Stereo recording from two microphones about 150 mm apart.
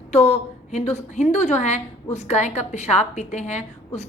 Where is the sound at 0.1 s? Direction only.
45° left (ahead or behind).